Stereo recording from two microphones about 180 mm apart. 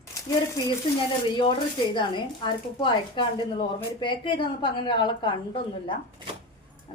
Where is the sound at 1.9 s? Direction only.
25° left (ahead or behind).